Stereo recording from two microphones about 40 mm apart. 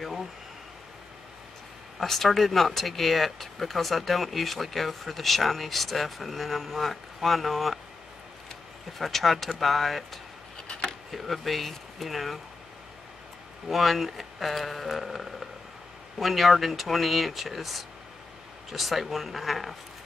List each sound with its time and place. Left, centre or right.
0.0 s speech: centre
2.0 s speech: centre
8.9 s speech: centre
10.7 s a sound: left
11.1 s speech: centre
13.7 s speech: centre